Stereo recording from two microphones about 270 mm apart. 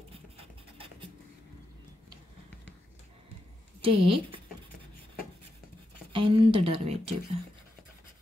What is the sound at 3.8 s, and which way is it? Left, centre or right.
Speech, centre.